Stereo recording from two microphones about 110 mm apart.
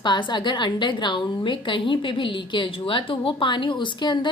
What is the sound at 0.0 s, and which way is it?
A woman's voice, 45° left (ahead or behind).